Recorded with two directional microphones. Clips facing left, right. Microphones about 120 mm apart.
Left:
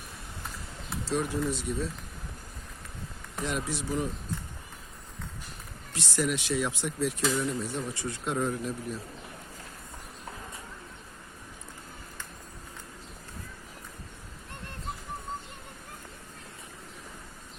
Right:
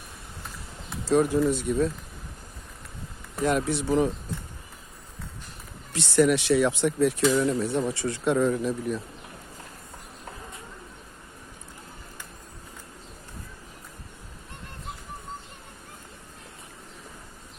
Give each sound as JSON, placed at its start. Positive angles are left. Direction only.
{"t": 1.0, "sound": "speech", "side_deg": -45}
{"t": 3.4, "sound": "speech", "side_deg": -55}
{"t": 6.0, "sound": "speech", "side_deg": -70}